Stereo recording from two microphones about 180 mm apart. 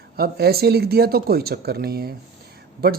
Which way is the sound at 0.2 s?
60° right (ahead or behind).